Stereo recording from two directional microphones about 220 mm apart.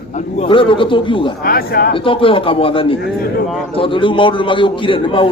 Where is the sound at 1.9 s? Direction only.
25° left (ahead or behind).